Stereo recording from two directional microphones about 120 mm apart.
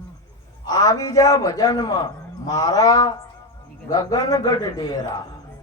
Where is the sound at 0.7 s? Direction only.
30° left (ahead or behind).